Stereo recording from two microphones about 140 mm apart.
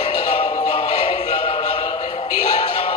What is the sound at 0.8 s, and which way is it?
Music, 45° left (ahead or behind).